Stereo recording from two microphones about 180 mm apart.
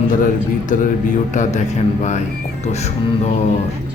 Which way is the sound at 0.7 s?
45° left (ahead or behind).